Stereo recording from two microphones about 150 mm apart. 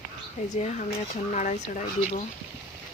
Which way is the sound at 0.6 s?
55° left (ahead or behind).